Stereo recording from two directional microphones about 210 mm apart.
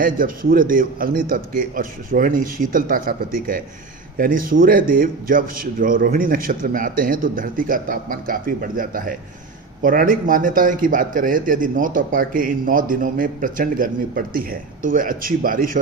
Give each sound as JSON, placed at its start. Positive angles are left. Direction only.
{"t": 0.0, "sound": "a man's voice", "side_deg": -40}